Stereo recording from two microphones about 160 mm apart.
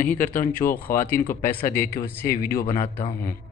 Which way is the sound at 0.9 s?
15° left (ahead or behind).